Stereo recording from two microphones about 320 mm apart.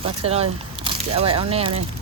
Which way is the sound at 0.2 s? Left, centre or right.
Centre.